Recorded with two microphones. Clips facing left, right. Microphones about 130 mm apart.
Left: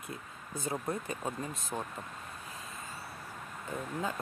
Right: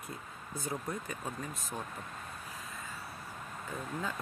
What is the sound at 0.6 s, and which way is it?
Speech, 25° left (ahead or behind).